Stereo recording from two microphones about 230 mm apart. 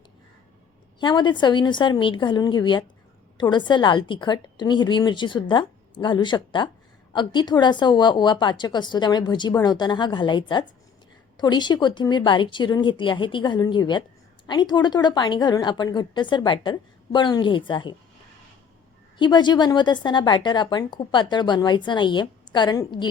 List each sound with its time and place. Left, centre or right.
0.9 s a woman's voice: centre
19.2 s a woman's voice: centre